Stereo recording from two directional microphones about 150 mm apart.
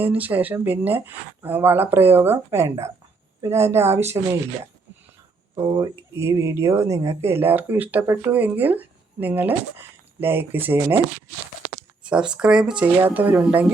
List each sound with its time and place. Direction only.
0.0 s speech: 10° right (ahead or behind)
12.0 s speech: 5° right (ahead or behind)